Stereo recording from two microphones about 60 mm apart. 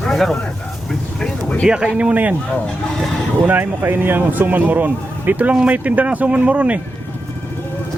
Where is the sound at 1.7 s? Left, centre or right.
Centre.